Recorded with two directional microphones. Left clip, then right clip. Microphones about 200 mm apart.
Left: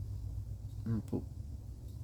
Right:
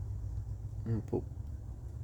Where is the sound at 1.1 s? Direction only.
25° left (ahead or behind).